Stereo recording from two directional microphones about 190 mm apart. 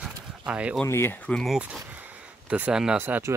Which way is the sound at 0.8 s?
10° left (ahead or behind).